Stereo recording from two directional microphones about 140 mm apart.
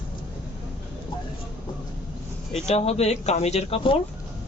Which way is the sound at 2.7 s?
50° left (ahead or behind).